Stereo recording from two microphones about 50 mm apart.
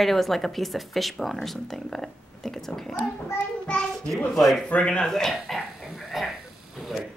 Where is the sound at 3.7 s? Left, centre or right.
Centre.